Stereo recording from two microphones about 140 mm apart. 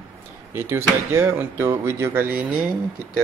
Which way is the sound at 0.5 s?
15° right (ahead or behind).